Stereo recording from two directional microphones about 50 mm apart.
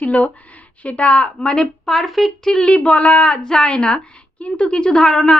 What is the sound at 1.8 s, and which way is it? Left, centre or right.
Speech, centre.